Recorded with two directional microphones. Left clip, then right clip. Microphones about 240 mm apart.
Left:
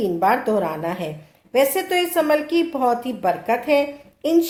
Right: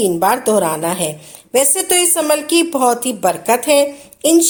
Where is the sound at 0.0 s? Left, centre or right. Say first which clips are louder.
Right 4 dB; right.